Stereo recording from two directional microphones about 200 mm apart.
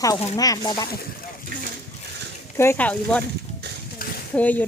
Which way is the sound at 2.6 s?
10° left (ahead or behind).